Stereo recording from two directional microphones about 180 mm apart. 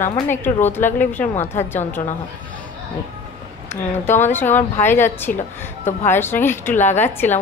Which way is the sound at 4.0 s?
10° left (ahead or behind).